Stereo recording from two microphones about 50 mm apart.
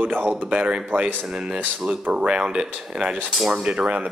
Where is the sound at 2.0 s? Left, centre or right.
Right.